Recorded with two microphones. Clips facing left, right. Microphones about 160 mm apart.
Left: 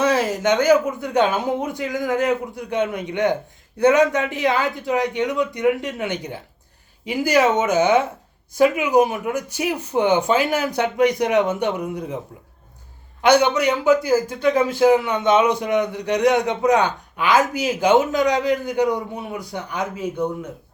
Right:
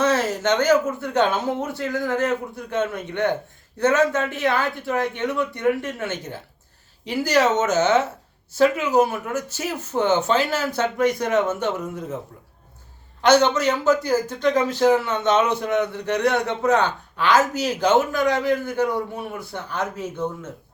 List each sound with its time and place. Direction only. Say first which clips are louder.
0.0 s a man's voice: left 2 dB; 10° left (ahead or behind)
13.2 s a man's voice: left 1 dB; 10° left (ahead or behind)